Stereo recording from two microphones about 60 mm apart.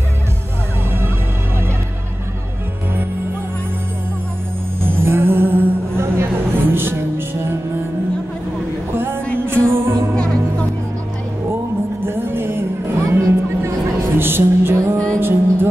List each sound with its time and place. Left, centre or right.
4.8 s music: right
8.9 s music: right
12.0 s music: right